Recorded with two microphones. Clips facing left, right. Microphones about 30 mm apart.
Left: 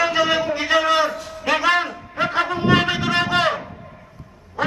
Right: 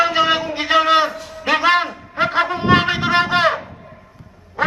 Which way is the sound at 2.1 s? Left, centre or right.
Right.